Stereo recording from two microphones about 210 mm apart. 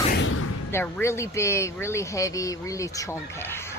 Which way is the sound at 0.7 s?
10° left (ahead or behind).